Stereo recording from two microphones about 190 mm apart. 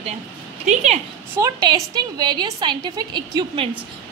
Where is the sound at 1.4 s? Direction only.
20° right (ahead or behind).